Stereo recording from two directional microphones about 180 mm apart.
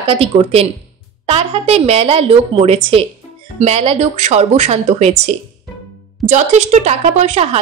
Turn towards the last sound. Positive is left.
turn(degrees=-35)  # may be behind; listen again after turning